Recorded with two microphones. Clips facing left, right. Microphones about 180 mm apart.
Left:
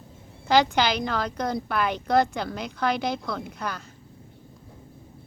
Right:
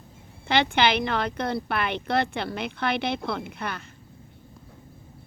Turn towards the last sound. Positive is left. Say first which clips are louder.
# even
turn(degrees=-60)  # may be behind; listen again after turning